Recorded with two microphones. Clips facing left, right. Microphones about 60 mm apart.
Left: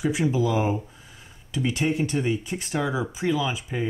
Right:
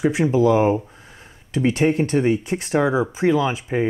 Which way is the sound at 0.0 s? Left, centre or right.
Right.